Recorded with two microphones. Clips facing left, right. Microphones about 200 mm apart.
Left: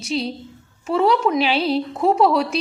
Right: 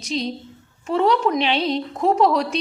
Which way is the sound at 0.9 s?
5° left (ahead or behind).